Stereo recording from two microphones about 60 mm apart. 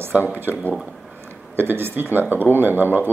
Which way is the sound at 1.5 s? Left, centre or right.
Right.